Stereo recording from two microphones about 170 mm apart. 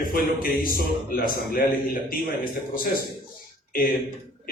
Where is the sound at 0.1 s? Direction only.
60° left (ahead or behind).